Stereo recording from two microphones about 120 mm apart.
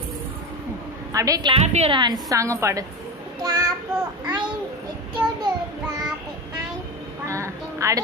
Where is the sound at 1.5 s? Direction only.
60° right (ahead or behind).